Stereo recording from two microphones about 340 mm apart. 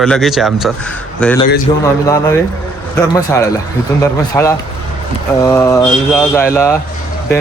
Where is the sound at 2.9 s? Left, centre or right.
Centre.